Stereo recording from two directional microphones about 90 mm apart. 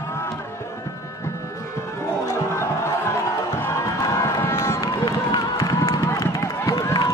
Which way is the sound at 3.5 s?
30° left (ahead or behind).